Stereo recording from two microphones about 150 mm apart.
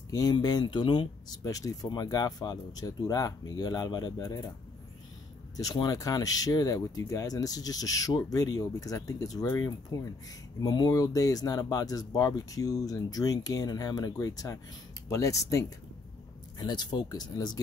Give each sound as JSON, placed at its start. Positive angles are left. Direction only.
{"t": 0.1, "sound": "speech", "side_deg": 25}
{"t": 5.6, "sound": "speech", "side_deg": 25}